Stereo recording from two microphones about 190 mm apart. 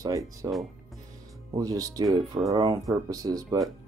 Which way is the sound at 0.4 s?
15° right (ahead or behind).